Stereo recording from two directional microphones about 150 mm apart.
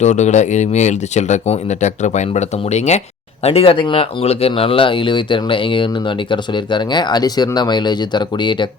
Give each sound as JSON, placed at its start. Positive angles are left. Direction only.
{"t": 0.0, "sound": "speech", "side_deg": 50}
{"t": 3.4, "sound": "speech", "side_deg": 40}